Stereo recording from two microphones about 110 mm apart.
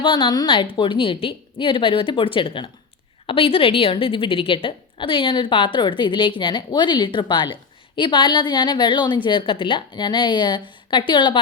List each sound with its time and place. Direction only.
0.0 s a woman's voice: 50° left (ahead or behind)